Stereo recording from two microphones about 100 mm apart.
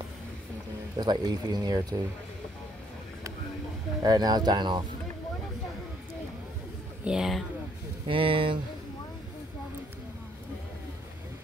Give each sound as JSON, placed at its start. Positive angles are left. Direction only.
{"t": 0.9, "sound": "speech", "side_deg": -40}
{"t": 4.0, "sound": "speech", "side_deg": -40}
{"t": 7.1, "sound": "speech", "side_deg": -5}
{"t": 8.1, "sound": "speech", "side_deg": -60}